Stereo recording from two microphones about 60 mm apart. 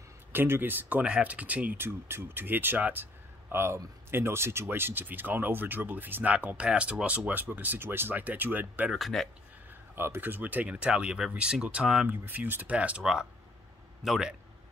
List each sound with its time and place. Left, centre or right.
0.3 s speech: right
1.8 s speech: right
3.5 s speech: right
8.9 s speech: centre
9.9 s speech: right; by 12.1 s centre
12.1 s speech: right
12.7 s speech: centre
13.0 s speech: centre